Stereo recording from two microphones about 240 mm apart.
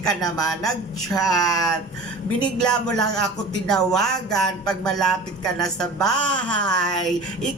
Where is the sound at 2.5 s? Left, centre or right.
Centre.